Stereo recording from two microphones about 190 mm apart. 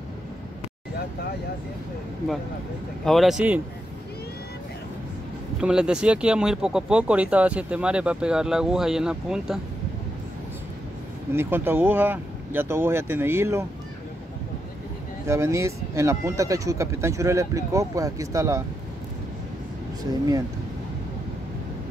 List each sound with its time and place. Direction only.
3.1 s speech: centre (ahead or behind)
5.6 s speech: 5° right (ahead or behind)
11.3 s speech: 10° right (ahead or behind)
15.2 s speech: 15° right (ahead or behind)
20.0 s speech: 20° right (ahead or behind)